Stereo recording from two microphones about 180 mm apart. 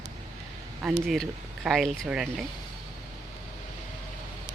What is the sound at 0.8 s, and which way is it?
Speech, centre (ahead or behind).